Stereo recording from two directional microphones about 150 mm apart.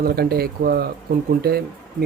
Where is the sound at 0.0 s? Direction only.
90° right.